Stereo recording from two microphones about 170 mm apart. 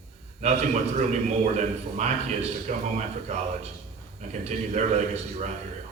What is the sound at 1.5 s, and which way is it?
A man's voice, 40° right (ahead or behind).